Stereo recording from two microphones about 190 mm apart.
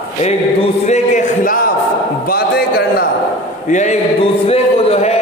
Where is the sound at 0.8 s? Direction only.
40° left (ahead or behind).